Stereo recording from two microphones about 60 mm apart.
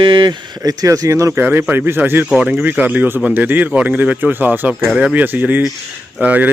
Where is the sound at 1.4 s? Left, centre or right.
Right.